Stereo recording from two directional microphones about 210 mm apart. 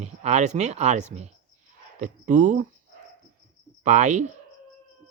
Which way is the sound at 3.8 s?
35° right (ahead or behind).